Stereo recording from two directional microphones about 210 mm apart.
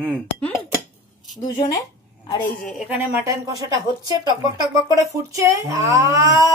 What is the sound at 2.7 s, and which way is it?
Speech, 5° right (ahead or behind).